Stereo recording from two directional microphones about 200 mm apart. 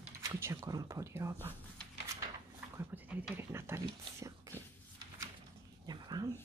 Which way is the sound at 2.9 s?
10° right (ahead or behind).